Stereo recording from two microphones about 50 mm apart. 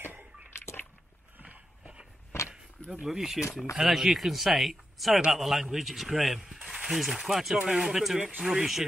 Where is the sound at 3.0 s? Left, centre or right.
Centre.